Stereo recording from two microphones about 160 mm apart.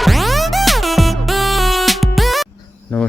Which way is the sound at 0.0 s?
Centre (ahead or behind).